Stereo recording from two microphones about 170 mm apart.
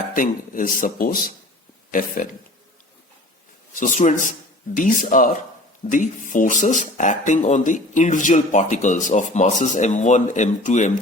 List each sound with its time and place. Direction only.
0.2 s speech: 55° left (ahead or behind)
3.8 s speech: 45° left (ahead or behind)